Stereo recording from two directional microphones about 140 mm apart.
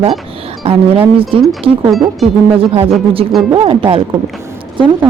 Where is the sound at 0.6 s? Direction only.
45° right (ahead or behind).